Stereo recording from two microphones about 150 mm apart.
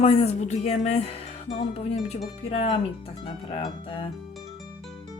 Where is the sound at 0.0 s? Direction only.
40° left (ahead or behind).